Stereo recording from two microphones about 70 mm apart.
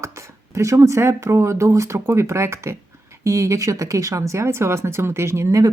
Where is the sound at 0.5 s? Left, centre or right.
Right.